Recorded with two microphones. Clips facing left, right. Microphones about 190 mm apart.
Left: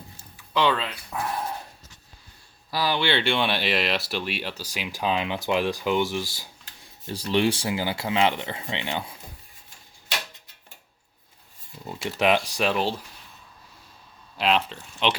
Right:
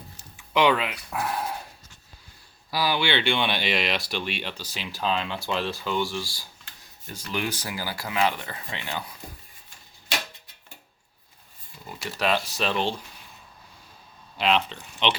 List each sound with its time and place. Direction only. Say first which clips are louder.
0.5 s speech: right 2 dB; 15° right (ahead or behind)
2.7 s speech: left 1 dB; 10° right (ahead or behind); by 6.5 s 20° left (ahead or behind)
7.1 s speech: left 8 dB; 30° left (ahead or behind)
11.9 s speech: left 4 dB; 20° left (ahead or behind)
14.3 s speech: even; centre (ahead or behind)